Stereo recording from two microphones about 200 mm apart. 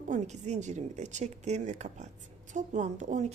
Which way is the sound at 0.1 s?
35° right (ahead or behind).